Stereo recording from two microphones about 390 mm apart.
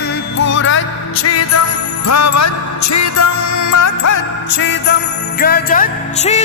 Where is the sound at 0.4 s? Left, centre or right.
Left.